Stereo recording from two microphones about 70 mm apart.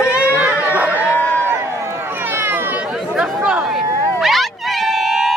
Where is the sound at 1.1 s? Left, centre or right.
Left.